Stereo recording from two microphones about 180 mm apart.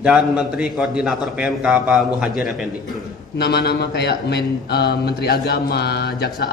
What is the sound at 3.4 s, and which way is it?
A man's voice, 65° left (ahead or behind).